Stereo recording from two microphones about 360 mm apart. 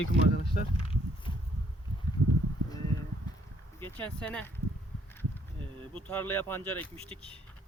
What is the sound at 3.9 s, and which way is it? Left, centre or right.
Speech, centre.